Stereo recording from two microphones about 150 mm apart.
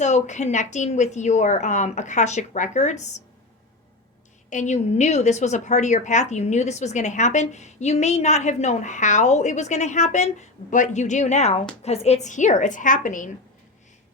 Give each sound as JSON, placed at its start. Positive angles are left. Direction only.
{"t": 0.0, "sound": "a woman's voice", "side_deg": 50}
{"t": 4.4, "sound": "a woman's voice", "side_deg": 55}